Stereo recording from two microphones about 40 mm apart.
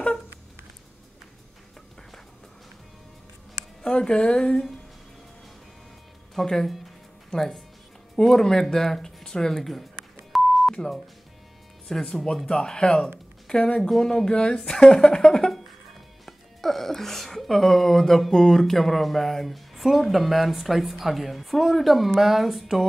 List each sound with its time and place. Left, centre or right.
3.8 s speech: left
6.3 s speech: centre
10.3 s beep: centre
10.7 s speech: centre
13.7 s a woman's voice: centre